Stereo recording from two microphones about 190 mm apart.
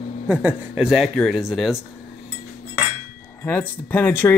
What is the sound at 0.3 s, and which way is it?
Speech, 5° right (ahead or behind).